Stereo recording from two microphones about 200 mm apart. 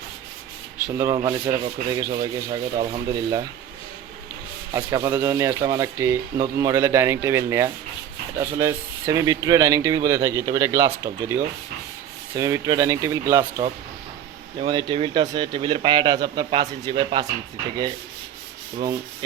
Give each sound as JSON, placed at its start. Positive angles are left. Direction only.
{"t": 0.9, "sound": "a man's voice", "side_deg": -15}
{"t": 4.7, "sound": "speech", "side_deg": -20}
{"t": 14.6, "sound": "a man's voice", "side_deg": -25}